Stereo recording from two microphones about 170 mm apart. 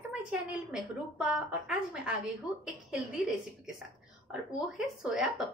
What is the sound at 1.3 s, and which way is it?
Speech, 5° right (ahead or behind).